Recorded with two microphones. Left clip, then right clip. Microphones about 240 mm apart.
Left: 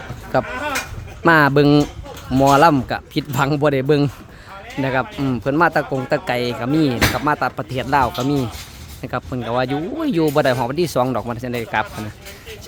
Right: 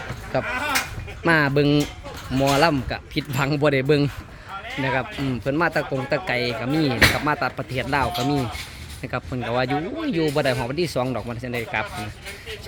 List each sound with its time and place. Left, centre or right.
0.3 s speech: centre
10.0 s speech: left